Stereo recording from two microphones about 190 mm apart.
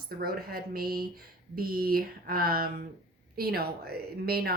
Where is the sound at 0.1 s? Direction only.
50° right (ahead or behind).